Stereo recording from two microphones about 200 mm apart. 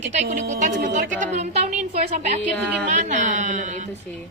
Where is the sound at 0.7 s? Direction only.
65° right (ahead or behind).